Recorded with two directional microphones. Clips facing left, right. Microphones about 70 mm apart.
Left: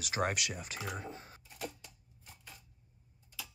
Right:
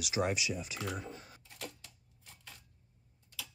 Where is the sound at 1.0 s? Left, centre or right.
Left.